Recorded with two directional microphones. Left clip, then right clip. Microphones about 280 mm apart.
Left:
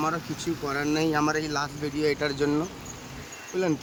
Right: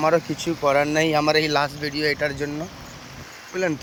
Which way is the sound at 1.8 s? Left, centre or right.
Centre.